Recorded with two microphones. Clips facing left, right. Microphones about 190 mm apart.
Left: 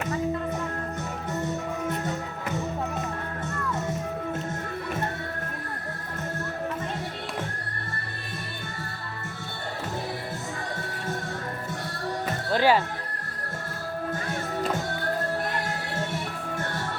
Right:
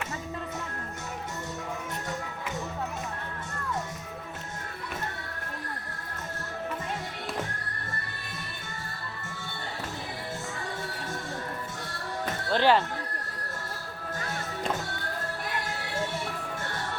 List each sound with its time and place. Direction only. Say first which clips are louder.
12.5 s speech: left 1 dB; 10° left (ahead or behind)